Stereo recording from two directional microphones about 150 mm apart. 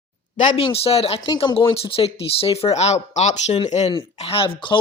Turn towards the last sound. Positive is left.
turn(degrees=40)  # may be behind; listen again after turning